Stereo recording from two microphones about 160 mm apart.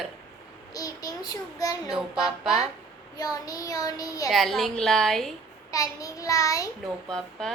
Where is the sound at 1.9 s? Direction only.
Centre (ahead or behind).